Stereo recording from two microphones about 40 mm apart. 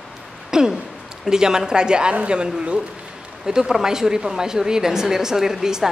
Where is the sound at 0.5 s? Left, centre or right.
Centre.